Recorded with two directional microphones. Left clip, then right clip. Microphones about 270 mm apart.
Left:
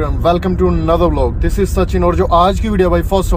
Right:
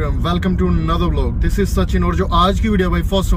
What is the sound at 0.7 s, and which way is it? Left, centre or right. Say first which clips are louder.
Speech: left 11 dB; left.